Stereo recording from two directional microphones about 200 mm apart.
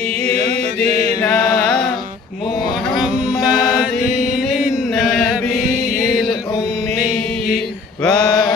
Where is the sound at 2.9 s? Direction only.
Centre (ahead or behind).